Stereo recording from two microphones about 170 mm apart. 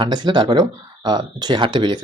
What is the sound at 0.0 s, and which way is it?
Speech, 25° right (ahead or behind).